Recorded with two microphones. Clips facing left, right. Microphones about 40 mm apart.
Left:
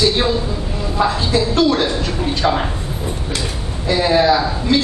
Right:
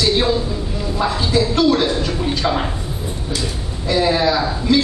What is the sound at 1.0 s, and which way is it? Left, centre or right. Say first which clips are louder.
Speech: left 1 dB; centre.